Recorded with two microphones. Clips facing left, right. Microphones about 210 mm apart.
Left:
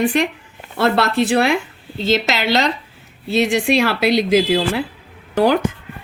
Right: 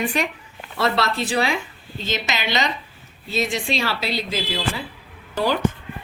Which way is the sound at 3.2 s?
70° left (ahead or behind).